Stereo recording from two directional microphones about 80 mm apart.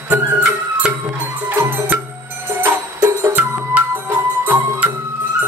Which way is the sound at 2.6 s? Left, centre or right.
Right.